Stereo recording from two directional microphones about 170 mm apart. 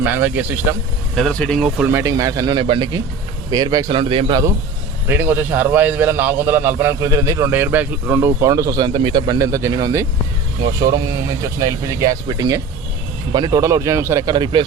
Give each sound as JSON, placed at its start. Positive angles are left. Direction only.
{"t": 0.0, "sound": "a man's voice", "side_deg": -10}
{"t": 1.1, "sound": "a man's voice", "side_deg": 5}
{"t": 5.0, "sound": "a man's voice", "side_deg": -10}